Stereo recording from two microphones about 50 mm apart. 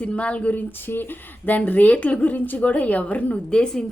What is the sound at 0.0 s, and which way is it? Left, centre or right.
Speech, left.